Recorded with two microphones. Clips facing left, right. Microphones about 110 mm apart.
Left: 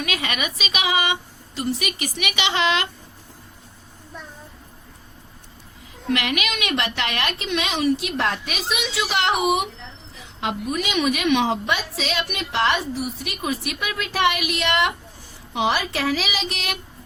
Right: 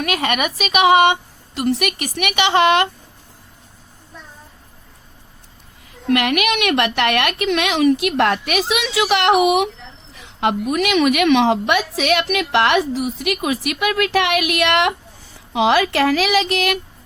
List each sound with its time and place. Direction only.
0.0 s a woman's voice: 55° right (ahead or behind)
6.1 s a woman's voice: 60° right (ahead or behind); by 16.7 s 85° right